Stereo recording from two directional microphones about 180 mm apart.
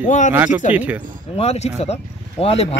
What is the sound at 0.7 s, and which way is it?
Speech, 10° right (ahead or behind).